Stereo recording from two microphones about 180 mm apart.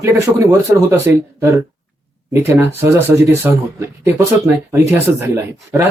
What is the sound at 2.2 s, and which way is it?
Speech, 15° right (ahead or behind).